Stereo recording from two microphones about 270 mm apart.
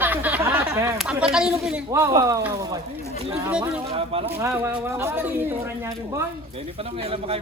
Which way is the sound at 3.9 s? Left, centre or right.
Right.